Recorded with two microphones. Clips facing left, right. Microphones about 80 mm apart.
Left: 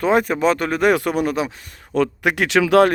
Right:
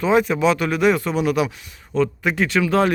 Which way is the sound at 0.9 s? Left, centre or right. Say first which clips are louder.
Left 2 dB; left.